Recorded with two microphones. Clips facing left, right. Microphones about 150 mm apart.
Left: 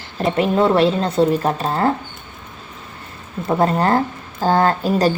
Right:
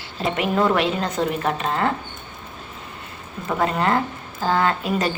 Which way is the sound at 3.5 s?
35° left (ahead or behind).